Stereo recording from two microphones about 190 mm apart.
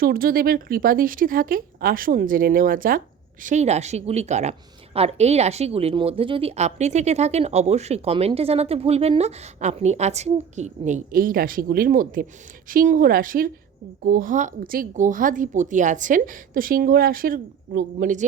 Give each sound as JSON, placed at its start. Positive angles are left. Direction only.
{"t": 0.0, "sound": "a woman's voice", "side_deg": -50}